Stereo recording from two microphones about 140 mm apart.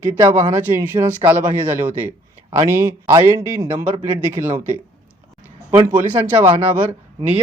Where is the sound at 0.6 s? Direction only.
15° right (ahead or behind).